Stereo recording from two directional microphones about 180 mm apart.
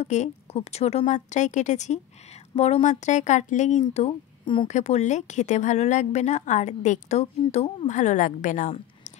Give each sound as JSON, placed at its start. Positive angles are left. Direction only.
{"t": 0.0, "sound": "speech", "side_deg": 40}